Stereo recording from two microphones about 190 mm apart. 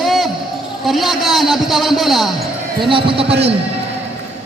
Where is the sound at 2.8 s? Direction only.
25° right (ahead or behind).